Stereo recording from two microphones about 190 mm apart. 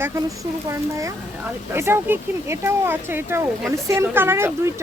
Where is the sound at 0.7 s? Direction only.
15° right (ahead or behind).